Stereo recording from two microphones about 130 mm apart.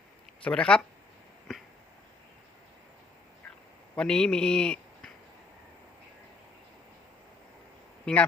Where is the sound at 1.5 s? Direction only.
5° left (ahead or behind).